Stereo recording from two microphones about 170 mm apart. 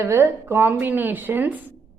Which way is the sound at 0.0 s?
15° right (ahead or behind).